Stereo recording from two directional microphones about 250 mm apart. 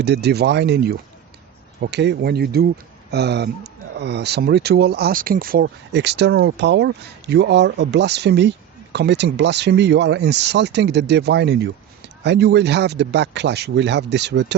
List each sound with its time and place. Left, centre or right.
0.0 s speech: right